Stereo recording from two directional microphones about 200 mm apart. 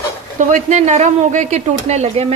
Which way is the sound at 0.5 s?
35° right (ahead or behind).